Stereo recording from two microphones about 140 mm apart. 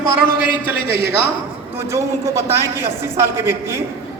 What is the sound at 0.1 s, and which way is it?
Speech, 90° left.